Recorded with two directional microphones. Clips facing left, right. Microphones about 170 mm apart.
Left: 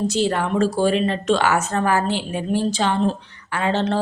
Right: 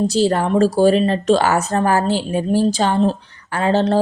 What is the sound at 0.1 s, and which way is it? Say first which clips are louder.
A woman's voice: right 4 dB; 35° right (ahead or behind).